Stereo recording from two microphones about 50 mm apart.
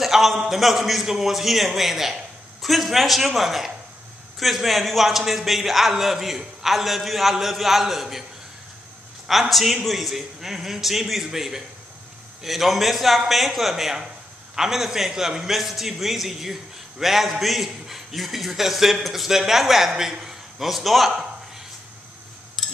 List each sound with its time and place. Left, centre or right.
0.0 s a man's voice: centre
9.3 s a man's voice: centre
22.6 s a sound: centre